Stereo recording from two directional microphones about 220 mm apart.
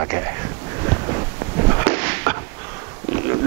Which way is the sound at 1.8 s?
10° right (ahead or behind).